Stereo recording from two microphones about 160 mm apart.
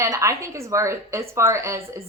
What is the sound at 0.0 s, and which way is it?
A woman's voice, 20° right (ahead or behind).